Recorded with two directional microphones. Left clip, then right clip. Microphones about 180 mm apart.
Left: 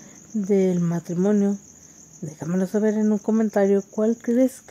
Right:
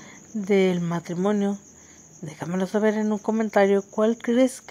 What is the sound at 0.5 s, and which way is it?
Speech, 25° right (ahead or behind).